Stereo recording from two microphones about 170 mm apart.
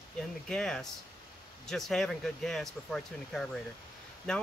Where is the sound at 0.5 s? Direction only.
5° left (ahead or behind).